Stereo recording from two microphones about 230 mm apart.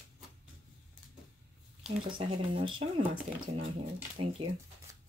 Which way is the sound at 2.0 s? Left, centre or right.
Right.